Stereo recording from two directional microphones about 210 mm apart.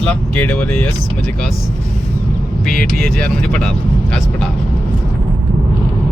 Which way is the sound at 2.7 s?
Centre (ahead or behind).